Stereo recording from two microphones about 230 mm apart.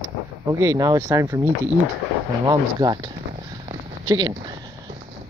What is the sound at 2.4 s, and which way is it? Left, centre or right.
Speech, centre.